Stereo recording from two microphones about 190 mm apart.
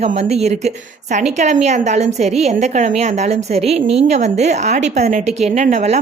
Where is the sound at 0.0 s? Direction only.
35° right (ahead or behind).